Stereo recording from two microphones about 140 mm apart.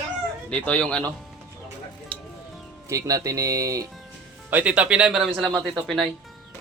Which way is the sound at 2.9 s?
25° right (ahead or behind).